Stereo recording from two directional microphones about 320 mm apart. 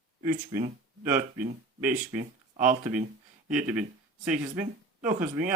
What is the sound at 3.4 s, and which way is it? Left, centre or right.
A man's voice, centre.